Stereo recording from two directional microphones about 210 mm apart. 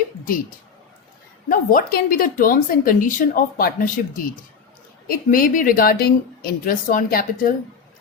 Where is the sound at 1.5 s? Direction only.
40° left (ahead or behind).